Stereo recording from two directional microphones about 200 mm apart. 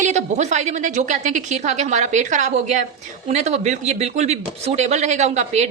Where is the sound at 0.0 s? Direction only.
35° right (ahead or behind).